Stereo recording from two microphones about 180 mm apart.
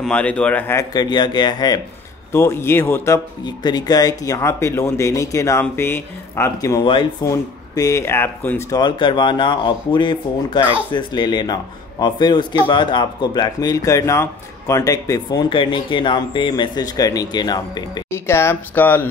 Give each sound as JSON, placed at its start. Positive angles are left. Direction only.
{"t": 0.0, "sound": "a man's voice", "side_deg": 5}